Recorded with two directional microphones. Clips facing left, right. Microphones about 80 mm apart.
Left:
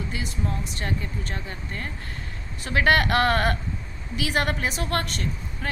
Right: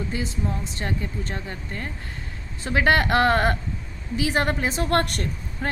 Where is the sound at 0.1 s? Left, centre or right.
Right.